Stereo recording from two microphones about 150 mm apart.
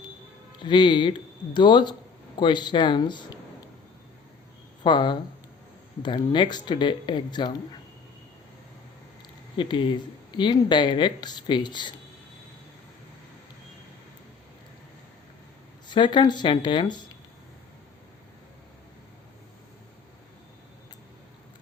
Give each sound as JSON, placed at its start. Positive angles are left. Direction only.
{"t": 0.6, "sound": "speech", "side_deg": 30}
{"t": 4.8, "sound": "speech", "side_deg": 30}
{"t": 9.6, "sound": "speech", "side_deg": 35}
{"t": 15.9, "sound": "speech", "side_deg": 30}